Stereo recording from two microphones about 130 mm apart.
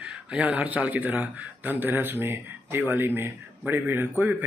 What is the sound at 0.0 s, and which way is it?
Speech, 5° right (ahead or behind).